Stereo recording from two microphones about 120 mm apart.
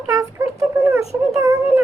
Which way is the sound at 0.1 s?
25° right (ahead or behind).